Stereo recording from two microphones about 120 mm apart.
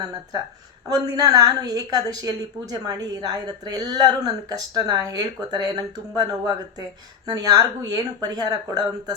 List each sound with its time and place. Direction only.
0.9 s a woman's voice: 30° right (ahead or behind)